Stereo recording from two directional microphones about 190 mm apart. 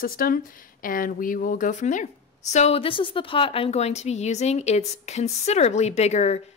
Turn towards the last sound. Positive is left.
turn(degrees=35)  # may be behind; listen again after turning